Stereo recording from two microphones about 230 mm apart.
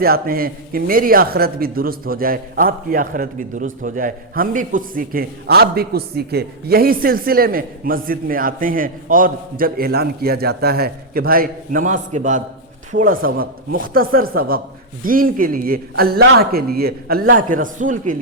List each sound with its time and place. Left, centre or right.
0.0 s a man's voice: right